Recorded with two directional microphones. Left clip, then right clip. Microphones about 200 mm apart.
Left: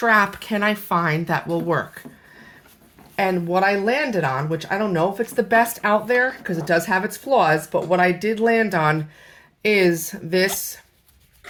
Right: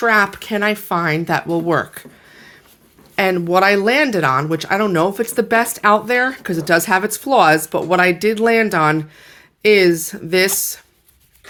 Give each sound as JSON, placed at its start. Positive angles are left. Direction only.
{"t": 0.0, "sound": "speech", "side_deg": -20}
{"t": 3.2, "sound": "speech", "side_deg": -35}